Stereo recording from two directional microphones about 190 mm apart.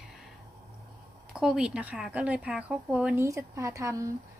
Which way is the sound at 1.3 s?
5° right (ahead or behind).